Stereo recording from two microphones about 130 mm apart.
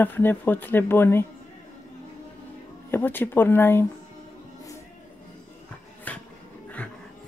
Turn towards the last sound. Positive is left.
turn(degrees=10)  # may be behind; listen again after turning